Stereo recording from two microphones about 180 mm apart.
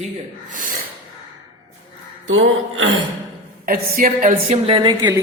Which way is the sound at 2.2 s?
90° right.